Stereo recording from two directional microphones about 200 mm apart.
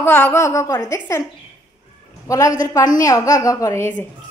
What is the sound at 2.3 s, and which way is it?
A woman's voice, 15° left (ahead or behind).